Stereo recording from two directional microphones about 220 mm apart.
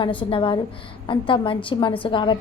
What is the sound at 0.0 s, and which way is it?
A woman's voice, 20° left (ahead or behind).